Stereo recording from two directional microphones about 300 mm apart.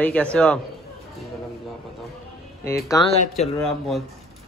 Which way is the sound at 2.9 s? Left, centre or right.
Centre.